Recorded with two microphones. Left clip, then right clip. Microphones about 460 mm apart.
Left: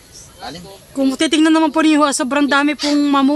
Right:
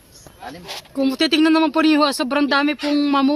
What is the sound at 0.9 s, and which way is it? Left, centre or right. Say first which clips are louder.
Speech: left 2 dB; right.